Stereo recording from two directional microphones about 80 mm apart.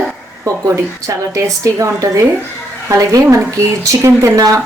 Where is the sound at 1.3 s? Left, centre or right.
Right.